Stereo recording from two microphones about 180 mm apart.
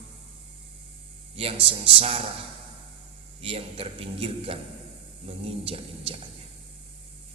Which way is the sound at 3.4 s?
30° right (ahead or behind).